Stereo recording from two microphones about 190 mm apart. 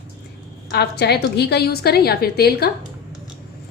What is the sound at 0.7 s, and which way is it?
A woman's voice, 60° left (ahead or behind).